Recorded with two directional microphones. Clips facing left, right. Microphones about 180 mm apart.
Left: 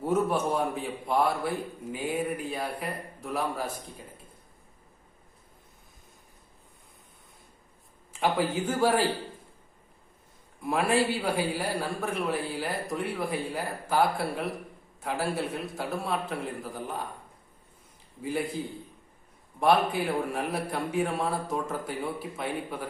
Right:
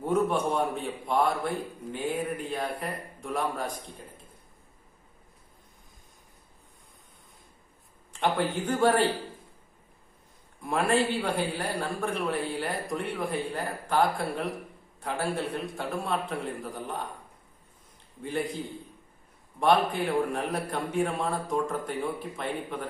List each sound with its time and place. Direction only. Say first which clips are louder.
0.0 s a man's voice: even; 5° left (ahead or behind)
8.1 s a man's voice: left 1 dB; 5° left (ahead or behind)
10.6 s a man's voice: even; centre (ahead or behind)
18.2 s a man's voice: even; 5° left (ahead or behind)
19.5 s a man's voice: even; 5° left (ahead or behind)